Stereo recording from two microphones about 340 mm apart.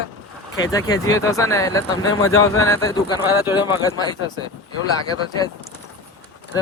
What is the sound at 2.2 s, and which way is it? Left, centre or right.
Speech, left.